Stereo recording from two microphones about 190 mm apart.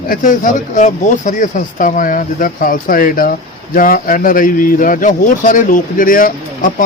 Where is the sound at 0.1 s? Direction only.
45° left (ahead or behind).